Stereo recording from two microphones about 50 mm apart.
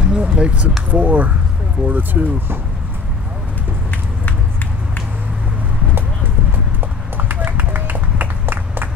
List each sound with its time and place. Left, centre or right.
0.0 s a sound: centre
0.8 s speech: right
7.2 s run: right